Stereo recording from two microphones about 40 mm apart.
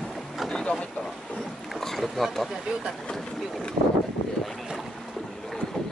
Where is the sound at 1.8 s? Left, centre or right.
Centre.